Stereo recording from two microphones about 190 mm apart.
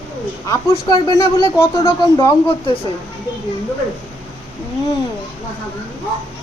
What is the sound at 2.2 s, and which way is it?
Speech, 25° left (ahead or behind).